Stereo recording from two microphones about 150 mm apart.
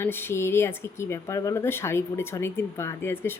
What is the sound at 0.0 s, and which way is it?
Speech, 15° left (ahead or behind).